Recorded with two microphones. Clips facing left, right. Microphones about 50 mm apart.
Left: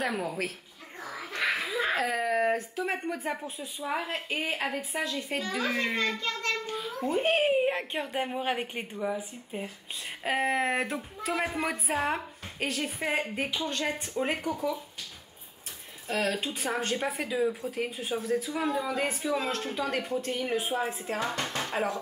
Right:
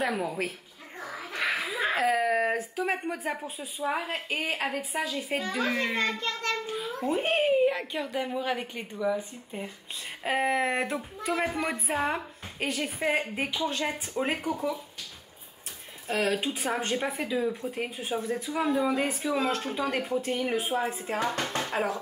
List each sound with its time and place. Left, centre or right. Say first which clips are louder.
0.0 s a woman's voice: right 2 dB; centre
1.0 s a sound: even; centre
1.6 s a woman's voice: right 1 dB; centre
7.5 s a woman's voice: right 2 dB; left
10.2 s a woman's voice: right 1 dB; centre
16.1 s a woman's voice: right 2 dB; centre